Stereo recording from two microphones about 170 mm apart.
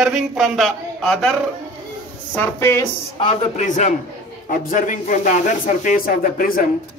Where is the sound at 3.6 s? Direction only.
45° left (ahead or behind).